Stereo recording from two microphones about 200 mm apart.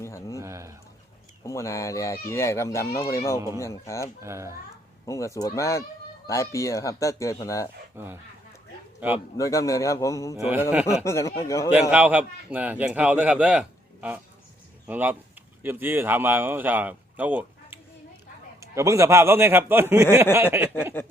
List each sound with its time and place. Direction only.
0.0 s a sound: 15° left (ahead or behind)
0.3 s speech: 15° right (ahead or behind)
1.5 s speech: 15° left (ahead or behind)
4.2 s speech: 15° right (ahead or behind)
5.0 s speech: 15° left (ahead or behind)
7.9 s speech: 10° right (ahead or behind)
9.4 s speech: 15° left (ahead or behind)
10.4 s speech: 5° right (ahead or behind)
11.0 s speech: 15° left (ahead or behind)
11.9 s speech: 5° right (ahead or behind)